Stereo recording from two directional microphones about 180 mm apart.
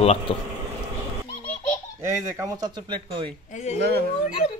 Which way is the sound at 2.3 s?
20° right (ahead or behind).